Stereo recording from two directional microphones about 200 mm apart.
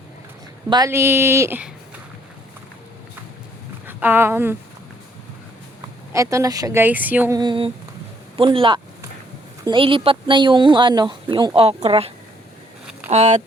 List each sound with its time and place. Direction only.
0.7 s a woman's voice: 15° right (ahead or behind)
3.8 s speech: 10° right (ahead or behind)
6.1 s a woman's voice: 15° right (ahead or behind)
7.3 s speech: 25° right (ahead or behind)
8.4 s a sound: 25° right (ahead or behind)
9.6 s speech: 25° right (ahead or behind)